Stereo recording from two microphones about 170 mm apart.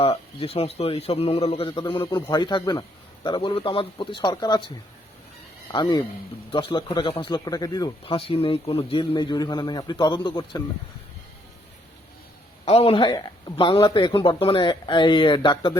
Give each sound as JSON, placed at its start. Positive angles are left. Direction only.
{"t": 0.0, "sound": "a man's voice", "side_deg": 35}
{"t": 5.7, "sound": "speech", "side_deg": 25}
{"t": 12.6, "sound": "speech", "side_deg": 35}